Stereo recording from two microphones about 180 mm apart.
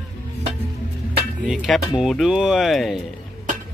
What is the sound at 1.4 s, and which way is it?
A man's voice, centre (ahead or behind).